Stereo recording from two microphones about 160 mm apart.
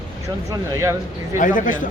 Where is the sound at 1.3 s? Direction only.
55° left (ahead or behind).